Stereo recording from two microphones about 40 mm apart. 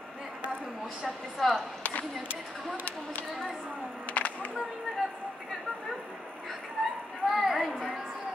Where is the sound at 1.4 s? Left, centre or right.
Centre.